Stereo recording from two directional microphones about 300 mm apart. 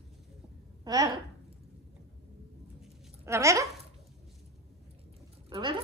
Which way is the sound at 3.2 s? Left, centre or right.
Centre.